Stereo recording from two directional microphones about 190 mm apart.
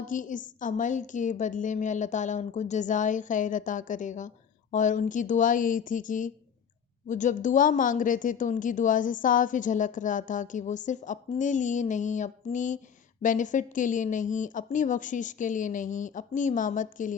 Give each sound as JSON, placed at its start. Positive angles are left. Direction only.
{"t": 0.0, "sound": "a woman's voice", "side_deg": 45}